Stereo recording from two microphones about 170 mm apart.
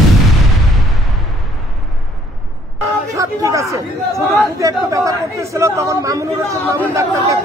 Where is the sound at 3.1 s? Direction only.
20° right (ahead or behind).